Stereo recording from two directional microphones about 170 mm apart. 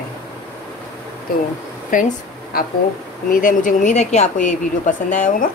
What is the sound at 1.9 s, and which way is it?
A woman's voice, 50° left (ahead or behind).